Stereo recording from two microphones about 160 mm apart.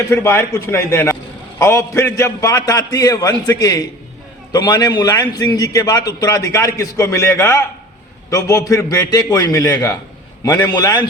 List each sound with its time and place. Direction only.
0.1 s a man's voice: 15° left (ahead or behind)